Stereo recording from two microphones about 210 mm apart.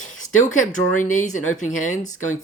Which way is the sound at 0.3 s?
35° left (ahead or behind).